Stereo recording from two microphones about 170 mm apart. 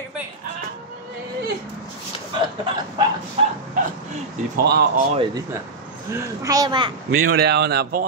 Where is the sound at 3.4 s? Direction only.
35° right (ahead or behind).